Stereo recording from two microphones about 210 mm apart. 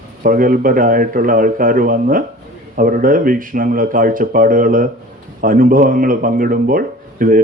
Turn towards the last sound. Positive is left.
turn(degrees=-40)  # may be behind; listen again after turning